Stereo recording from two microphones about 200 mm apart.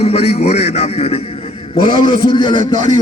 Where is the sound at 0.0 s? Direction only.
30° left (ahead or behind).